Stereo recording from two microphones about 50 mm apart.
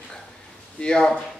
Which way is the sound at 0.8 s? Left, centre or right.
Centre.